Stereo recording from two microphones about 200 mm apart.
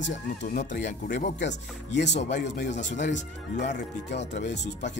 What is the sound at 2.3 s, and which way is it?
Speech, 60° left (ahead or behind).